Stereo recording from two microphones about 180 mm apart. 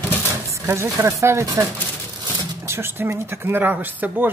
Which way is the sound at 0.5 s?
15° right (ahead or behind).